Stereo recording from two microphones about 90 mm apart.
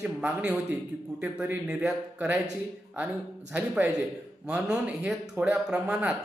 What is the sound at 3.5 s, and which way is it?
A man's voice, 15° right (ahead or behind).